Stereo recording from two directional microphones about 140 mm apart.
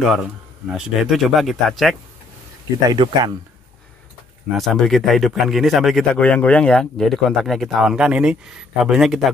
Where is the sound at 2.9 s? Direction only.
30° right (ahead or behind).